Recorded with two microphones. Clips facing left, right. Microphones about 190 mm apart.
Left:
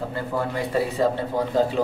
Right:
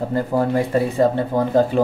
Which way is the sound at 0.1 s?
40° right (ahead or behind).